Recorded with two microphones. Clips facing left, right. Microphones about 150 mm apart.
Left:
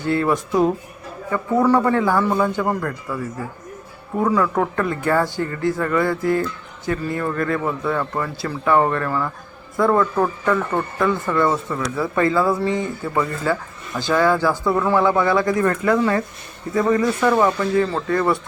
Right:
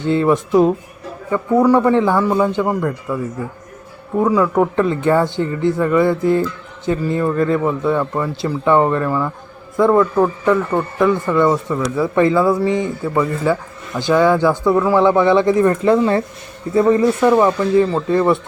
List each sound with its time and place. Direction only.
0.0 s speech: 20° right (ahead or behind)
4.2 s speech: 15° right (ahead or behind)
14.7 s speech: 5° right (ahead or behind)
14.9 s speech: 20° right (ahead or behind)